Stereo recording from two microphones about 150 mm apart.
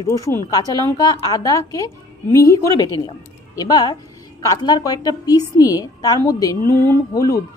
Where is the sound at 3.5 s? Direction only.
25° left (ahead or behind).